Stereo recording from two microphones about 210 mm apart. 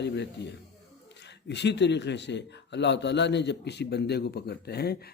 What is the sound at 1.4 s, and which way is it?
A man's voice, 55° left (ahead or behind).